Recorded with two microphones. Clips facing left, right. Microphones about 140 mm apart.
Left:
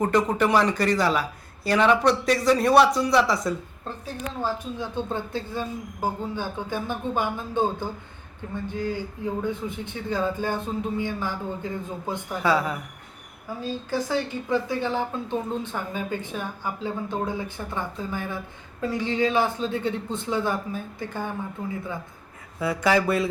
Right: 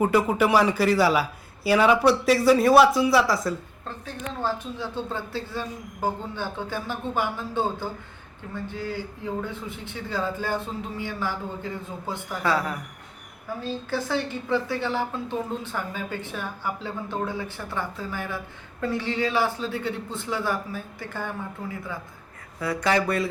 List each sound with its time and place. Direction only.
0.0 s speech: 5° right (ahead or behind)
4.8 s a woman's voice: 20° left (ahead or behind)
13.6 s a woman's voice: 15° left (ahead or behind)
22.8 s a woman's voice: 5° left (ahead or behind)
23.0 s speech: 25° left (ahead or behind)